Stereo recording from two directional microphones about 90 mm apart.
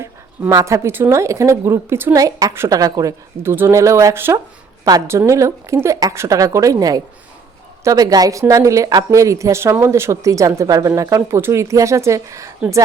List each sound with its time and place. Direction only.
0.5 s a woman's voice: 35° right (ahead or behind)
2.1 s a woman's voice: 40° right (ahead or behind)
3.4 s a woman's voice: 25° right (ahead or behind)